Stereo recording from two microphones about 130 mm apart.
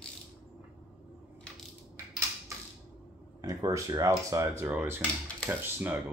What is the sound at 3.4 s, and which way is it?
Speech, 30° right (ahead or behind).